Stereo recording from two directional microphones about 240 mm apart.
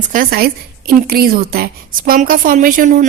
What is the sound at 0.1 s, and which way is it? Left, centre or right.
A woman's voice, right.